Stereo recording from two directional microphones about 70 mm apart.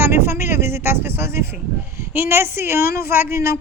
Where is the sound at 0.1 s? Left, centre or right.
Right.